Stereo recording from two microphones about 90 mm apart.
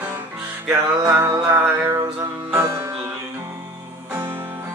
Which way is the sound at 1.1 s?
30° right (ahead or behind).